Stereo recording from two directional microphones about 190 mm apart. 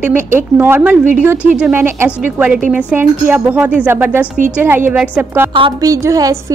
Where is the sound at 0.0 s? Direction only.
10° right (ahead or behind).